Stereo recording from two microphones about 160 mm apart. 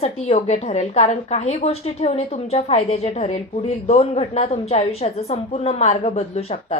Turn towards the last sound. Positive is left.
turn(degrees=40)  # may be behind; listen again after turning